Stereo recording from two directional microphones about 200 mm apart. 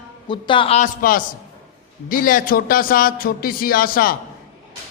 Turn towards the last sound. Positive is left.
turn(degrees=45)  # may be behind; listen again after turning